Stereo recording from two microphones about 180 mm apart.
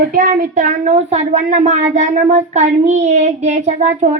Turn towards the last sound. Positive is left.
turn(degrees=-40)  # may be behind; listen again after turning